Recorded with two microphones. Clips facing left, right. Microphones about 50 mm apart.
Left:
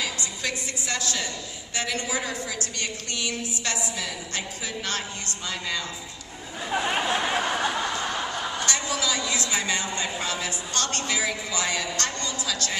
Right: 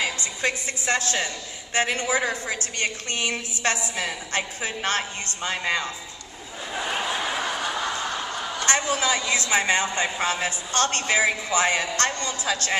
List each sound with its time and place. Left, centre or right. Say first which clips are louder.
0.4 s a woman's voice: right 6 dB; right
6.7 s a sound: left 3 dB; centre
7.2 s snicker: left 2 dB; left
8.6 s a woman's voice: right 7 dB; right